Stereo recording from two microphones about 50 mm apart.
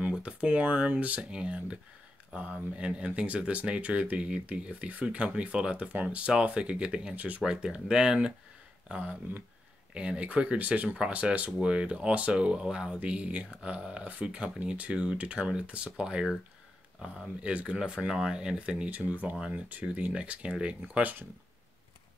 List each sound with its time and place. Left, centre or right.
0.1 s speech: right
7.4 s speech: centre
8.8 s speech: right
13.0 s speech: right
17.4 s speech: right
18.9 s speech: right